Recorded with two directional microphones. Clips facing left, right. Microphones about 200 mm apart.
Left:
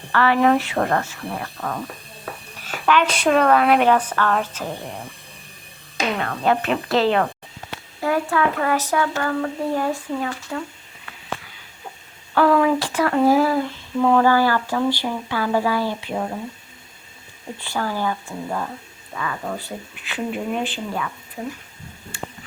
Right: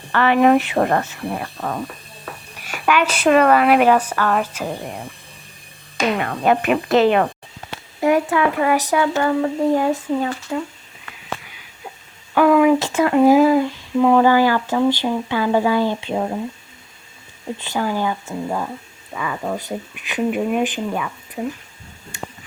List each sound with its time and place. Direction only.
0.1 s speech: 20° right (ahead or behind)
6.1 s speech: 15° right (ahead or behind)
12.3 s speech: 15° right (ahead or behind)
17.6 s speech: 15° right (ahead or behind)